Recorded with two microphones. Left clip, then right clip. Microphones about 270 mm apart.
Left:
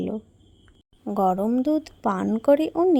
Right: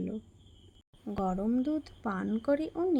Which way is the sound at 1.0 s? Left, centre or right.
Left.